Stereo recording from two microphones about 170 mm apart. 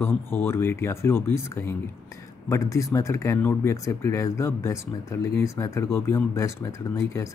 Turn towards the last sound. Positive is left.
turn(degrees=15)  # may be behind; listen again after turning